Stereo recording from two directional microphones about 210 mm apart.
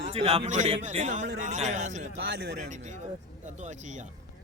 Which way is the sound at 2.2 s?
50° right (ahead or behind).